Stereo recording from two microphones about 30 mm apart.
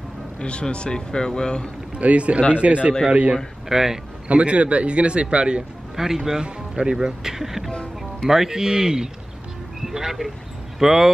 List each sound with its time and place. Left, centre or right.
0.4 s speech: left
2.0 s a man's voice: right
3.6 s speech: centre
4.3 s a man's voice: right
5.9 s speech: centre
7.7 s speech: left
8.3 s speech: centre
8.5 s a man's voice: right
9.8 s speech: centre